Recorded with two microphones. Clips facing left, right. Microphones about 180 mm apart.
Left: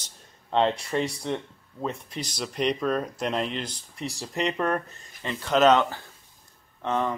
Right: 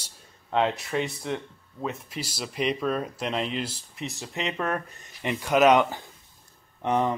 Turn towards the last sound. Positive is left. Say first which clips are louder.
# right 2 dB
turn(degrees=-15)  # may be behind; listen again after turning